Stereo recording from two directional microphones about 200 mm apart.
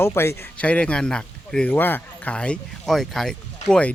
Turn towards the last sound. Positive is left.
turn(degrees=5)  # may be behind; listen again after turning